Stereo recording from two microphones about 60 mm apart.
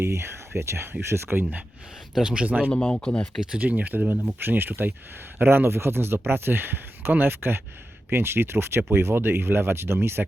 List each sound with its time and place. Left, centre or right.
0.0 s speech: right
2.1 s speech: centre
2.9 s speech: centre
3.5 s speech: right